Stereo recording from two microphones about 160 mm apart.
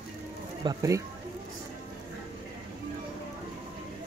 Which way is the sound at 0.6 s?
20° right (ahead or behind).